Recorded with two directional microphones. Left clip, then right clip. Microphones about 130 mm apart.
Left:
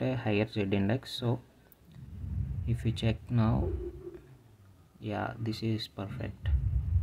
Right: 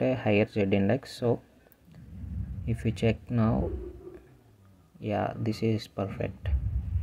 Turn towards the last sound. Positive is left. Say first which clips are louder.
# right 8 dB
turn(degrees=-25)  # may be behind; listen again after turning